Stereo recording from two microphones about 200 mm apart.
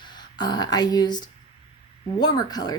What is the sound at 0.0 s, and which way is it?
A woman's voice, 20° left (ahead or behind).